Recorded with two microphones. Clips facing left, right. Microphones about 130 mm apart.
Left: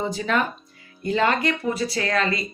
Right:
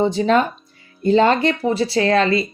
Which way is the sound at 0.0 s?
25° right (ahead or behind).